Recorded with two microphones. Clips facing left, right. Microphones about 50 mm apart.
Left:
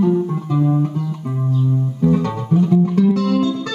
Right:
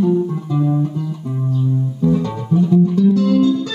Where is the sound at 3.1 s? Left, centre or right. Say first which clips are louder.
Right 2 dB; left.